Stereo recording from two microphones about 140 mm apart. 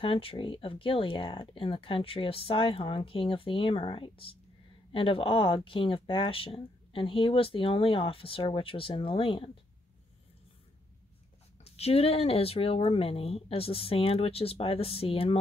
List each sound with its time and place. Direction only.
0.0 s speech: 40° left (ahead or behind)
11.6 s speech: 45° left (ahead or behind)